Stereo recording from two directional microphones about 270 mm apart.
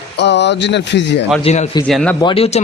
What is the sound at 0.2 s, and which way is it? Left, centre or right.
A man's voice, left.